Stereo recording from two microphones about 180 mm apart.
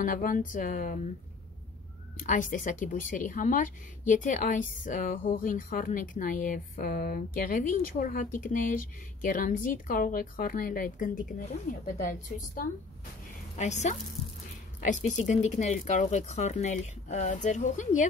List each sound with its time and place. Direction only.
0.0 s speech: 50° left (ahead or behind)
2.1 s speech: 45° left (ahead or behind)
13.6 s speech: 40° left (ahead or behind)